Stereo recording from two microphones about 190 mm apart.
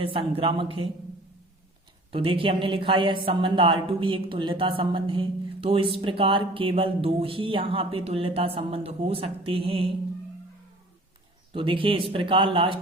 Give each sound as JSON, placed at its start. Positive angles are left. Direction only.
{"t": 0.0, "sound": "a woman's voice", "side_deg": -30}
{"t": 2.1, "sound": "a woman's voice", "side_deg": -30}
{"t": 11.5, "sound": "a woman's voice", "side_deg": -25}